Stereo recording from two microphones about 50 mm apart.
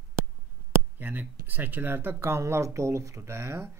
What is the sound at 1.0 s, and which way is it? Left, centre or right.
Speech, right.